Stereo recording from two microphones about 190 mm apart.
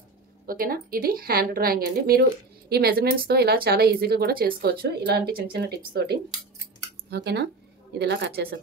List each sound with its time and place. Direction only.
0.5 s a woman's voice: 50° right (ahead or behind)